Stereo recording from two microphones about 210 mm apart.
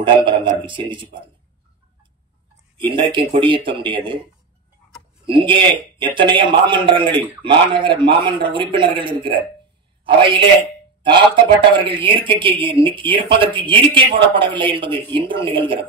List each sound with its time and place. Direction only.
0.0 s a man's voice: 25° right (ahead or behind)
2.8 s a man's voice: 25° right (ahead or behind)
5.2 s a man's voice: 25° right (ahead or behind)